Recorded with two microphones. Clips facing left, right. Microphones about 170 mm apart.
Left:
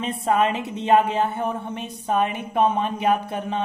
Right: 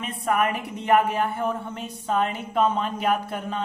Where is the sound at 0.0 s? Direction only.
25° left (ahead or behind).